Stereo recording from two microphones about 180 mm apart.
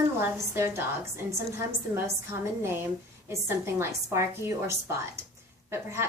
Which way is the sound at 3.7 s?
15° right (ahead or behind).